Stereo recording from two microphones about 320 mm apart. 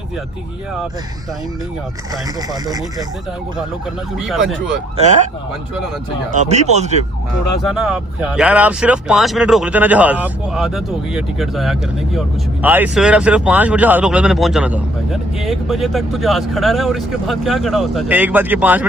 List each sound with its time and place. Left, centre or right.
2.5 s speech: centre
4.2 s speech: centre
6.3 s speech: right
7.6 s speech: centre